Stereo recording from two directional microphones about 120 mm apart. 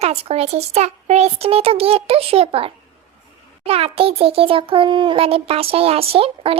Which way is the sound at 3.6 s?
55° right (ahead or behind).